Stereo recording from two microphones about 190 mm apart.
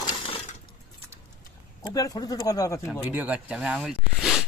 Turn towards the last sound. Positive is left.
turn(degrees=-5)  # may be behind; listen again after turning